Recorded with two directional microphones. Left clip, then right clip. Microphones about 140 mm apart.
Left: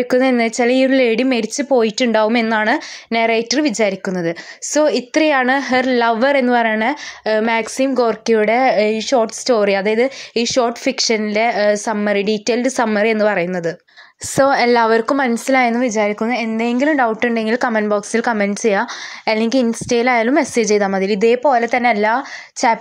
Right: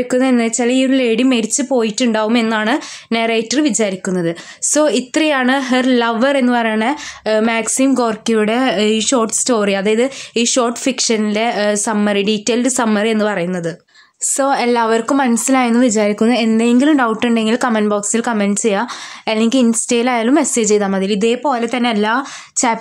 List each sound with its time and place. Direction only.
0.1 s a woman's voice: 35° left (ahead or behind)